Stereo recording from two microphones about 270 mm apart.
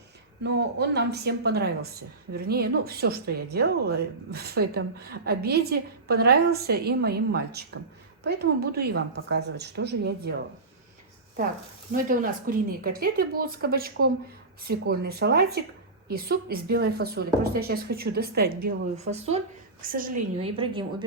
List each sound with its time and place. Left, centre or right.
0.4 s a woman's voice: right
11.9 s a woman's voice: right
20.4 s a woman's voice: centre